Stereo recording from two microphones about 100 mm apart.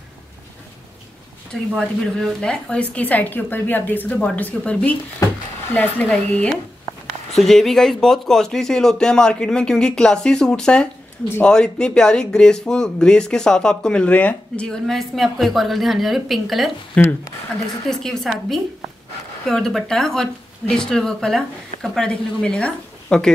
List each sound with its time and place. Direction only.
1.5 s speech: 5° left (ahead or behind)
17.0 s speech: 10° left (ahead or behind)